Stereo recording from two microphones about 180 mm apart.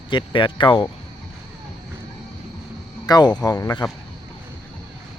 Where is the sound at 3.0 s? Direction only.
20° left (ahead or behind).